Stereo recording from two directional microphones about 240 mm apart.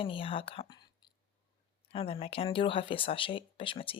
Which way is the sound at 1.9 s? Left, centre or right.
Left.